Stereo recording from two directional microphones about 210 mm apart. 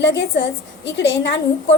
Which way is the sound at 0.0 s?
55° left (ahead or behind).